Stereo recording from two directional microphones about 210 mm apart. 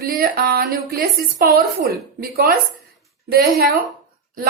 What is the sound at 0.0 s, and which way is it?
A woman's voice, 45° right (ahead or behind).